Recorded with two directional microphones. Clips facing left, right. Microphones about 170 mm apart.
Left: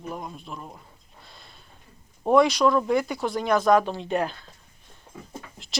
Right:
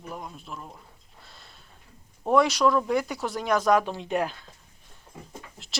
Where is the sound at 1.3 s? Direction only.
5° right (ahead or behind).